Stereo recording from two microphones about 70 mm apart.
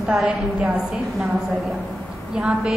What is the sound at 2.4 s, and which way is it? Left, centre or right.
Speech, centre.